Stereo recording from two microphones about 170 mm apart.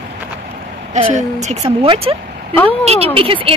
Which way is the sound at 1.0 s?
40° right (ahead or behind).